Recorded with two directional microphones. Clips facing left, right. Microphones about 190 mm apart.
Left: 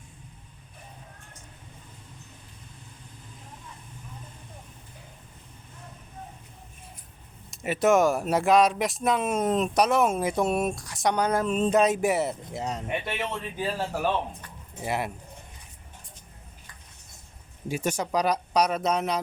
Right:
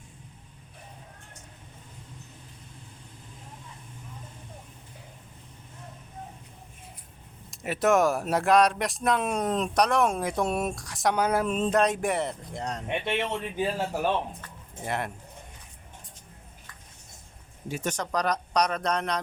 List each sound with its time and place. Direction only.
7.5 s speech: centre (ahead or behind)
13.1 s speech: 25° right (ahead or behind)
14.8 s speech: 10° left (ahead or behind)
17.7 s speech: 10° left (ahead or behind)